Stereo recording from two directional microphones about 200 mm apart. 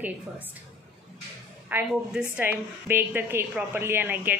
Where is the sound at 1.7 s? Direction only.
5° right (ahead or behind).